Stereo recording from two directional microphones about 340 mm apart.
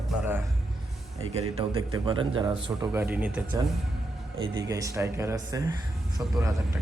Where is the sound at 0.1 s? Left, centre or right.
Centre.